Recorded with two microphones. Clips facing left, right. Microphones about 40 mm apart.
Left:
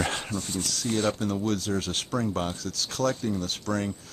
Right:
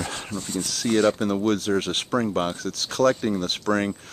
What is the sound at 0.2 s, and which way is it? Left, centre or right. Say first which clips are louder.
Speech: right 1 dB; centre.